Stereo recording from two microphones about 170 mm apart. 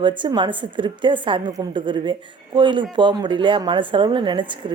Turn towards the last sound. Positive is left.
turn(degrees=-30)  # may be behind; listen again after turning